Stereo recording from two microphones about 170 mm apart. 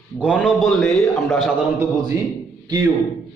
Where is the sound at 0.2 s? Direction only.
5° right (ahead or behind).